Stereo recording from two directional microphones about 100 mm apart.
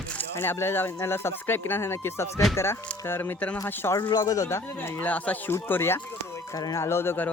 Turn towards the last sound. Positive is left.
turn(degrees=25)  # may be behind; listen again after turning